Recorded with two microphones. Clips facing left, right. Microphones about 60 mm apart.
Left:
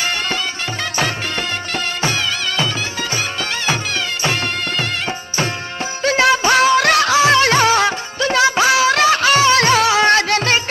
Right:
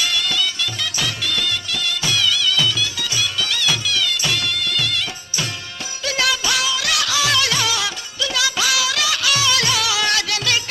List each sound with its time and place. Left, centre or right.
0.0 s music: left